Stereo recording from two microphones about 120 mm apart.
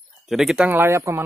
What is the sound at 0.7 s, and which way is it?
Speech, 20° right (ahead or behind).